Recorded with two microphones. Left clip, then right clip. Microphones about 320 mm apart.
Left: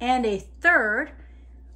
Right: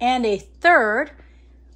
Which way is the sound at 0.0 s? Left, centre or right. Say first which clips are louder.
Right 3 dB; centre.